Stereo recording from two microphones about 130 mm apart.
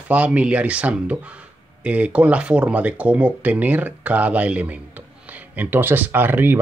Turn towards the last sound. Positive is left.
turn(degrees=-15)  # may be behind; listen again after turning